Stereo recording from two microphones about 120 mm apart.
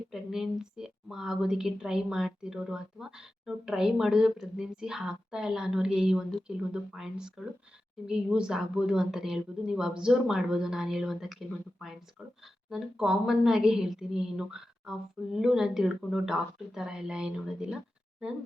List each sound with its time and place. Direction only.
0.1 s a woman's voice: 5° right (ahead or behind)